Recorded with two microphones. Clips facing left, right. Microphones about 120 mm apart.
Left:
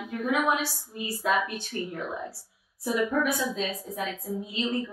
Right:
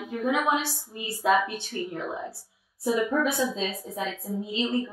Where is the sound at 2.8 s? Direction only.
25° right (ahead or behind).